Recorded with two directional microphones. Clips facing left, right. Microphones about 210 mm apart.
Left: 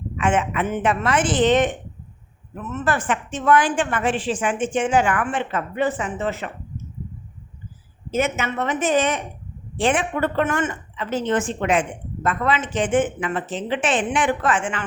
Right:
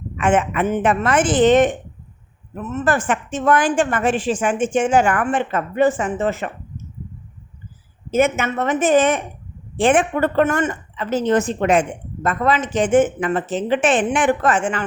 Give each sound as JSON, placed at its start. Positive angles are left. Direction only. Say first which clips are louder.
{"t": 0.2, "sound": "speech", "louder": "right 4 dB", "side_deg": -50}
{"t": 2.7, "sound": "speech", "louder": "right 3 dB", "side_deg": -45}
{"t": 8.1, "sound": "speech", "louder": "right 5 dB", "side_deg": -50}